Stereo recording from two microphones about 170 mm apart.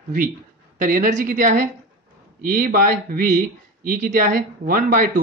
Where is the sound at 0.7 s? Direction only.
50° right (ahead or behind).